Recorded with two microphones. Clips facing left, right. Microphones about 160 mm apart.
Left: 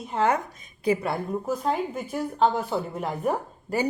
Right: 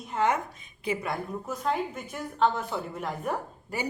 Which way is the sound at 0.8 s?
35° left (ahead or behind).